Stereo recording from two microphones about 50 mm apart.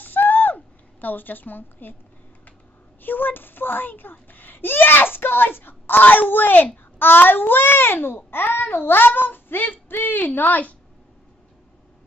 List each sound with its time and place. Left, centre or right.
0.0 s owl: left
1.0 s speech: left
3.0 s speech: left